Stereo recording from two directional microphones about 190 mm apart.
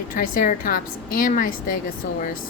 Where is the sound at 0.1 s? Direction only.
45° left (ahead or behind).